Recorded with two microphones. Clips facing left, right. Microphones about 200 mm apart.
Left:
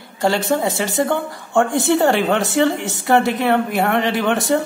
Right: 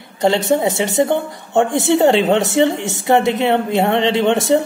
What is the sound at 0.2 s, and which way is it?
A man's voice, 20° right (ahead or behind).